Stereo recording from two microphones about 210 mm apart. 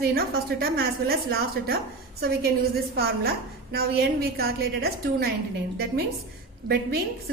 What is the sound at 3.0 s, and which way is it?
A woman's voice, 50° right (ahead or behind).